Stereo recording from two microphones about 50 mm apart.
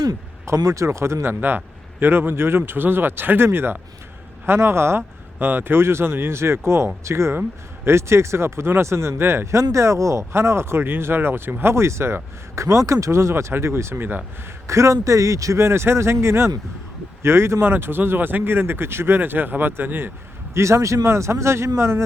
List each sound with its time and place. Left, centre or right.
0.4 s speech: right
1.3 s speech: right
11.6 s speech: right
14.7 s speech: right
17.6 s speech: right
20.5 s speech: right